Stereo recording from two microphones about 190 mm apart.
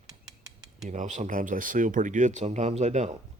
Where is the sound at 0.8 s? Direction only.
35° right (ahead or behind).